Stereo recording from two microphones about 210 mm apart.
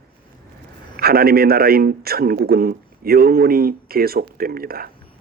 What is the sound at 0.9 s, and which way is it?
Speech, 45° right (ahead or behind).